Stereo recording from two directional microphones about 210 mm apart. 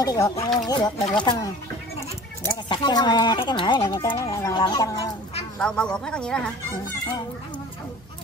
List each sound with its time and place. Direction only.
0.0 s speech: 15° left (ahead or behind)
5.6 s speech: 5° left (ahead or behind)